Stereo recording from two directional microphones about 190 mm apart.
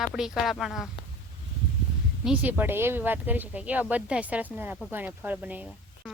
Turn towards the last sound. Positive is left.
turn(degrees=-10)  # may be behind; listen again after turning